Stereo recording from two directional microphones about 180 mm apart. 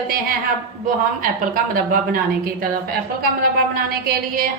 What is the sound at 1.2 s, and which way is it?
Speech, 50° right (ahead or behind).